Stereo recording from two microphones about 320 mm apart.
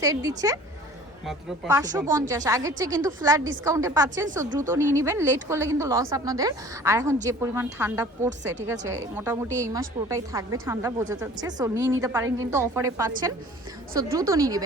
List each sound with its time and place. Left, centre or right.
0.0 s a woman's voice: centre
4.4 s speech: right
4.7 s a woman's voice: centre